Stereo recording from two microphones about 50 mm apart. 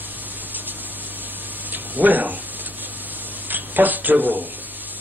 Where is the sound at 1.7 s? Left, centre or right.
Right.